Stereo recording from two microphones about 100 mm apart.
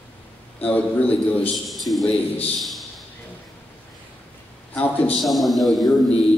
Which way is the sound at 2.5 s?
Centre (ahead or behind).